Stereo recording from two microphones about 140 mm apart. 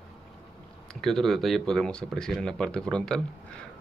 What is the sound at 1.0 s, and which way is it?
Speech, centre (ahead or behind).